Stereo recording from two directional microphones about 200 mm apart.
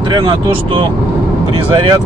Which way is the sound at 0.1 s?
25° right (ahead or behind).